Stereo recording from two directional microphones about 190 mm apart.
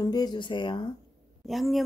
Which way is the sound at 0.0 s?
20° left (ahead or behind).